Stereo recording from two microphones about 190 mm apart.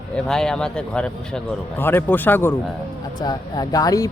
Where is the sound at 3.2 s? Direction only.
20° left (ahead or behind).